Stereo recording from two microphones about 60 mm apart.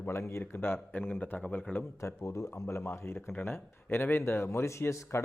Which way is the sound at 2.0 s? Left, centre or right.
Left.